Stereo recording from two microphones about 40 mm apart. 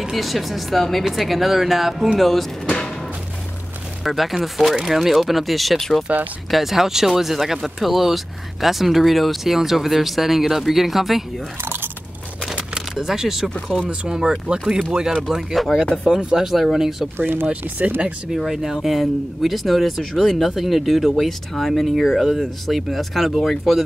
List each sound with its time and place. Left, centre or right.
0.1 s speech: centre
4.0 s speech: centre
6.1 s speech: right
6.5 s speech: centre
12.9 s speech: centre
13.8 s speech: centre
15.5 s speech: centre
16.1 s speech: right
16.4 s speech: centre
17.2 s speech: right
17.5 s speech: right
18.4 s speech: centre